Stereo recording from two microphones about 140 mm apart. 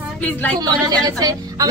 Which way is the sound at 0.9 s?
25° right (ahead or behind).